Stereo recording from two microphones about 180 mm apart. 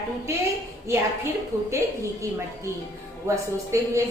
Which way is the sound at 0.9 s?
15° right (ahead or behind).